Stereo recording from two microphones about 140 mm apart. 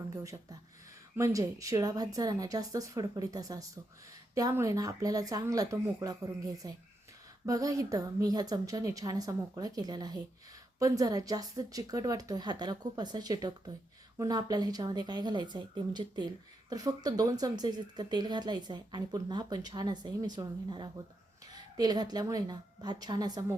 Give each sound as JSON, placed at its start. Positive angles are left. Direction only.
{"t": 1.1, "sound": "speech", "side_deg": -20}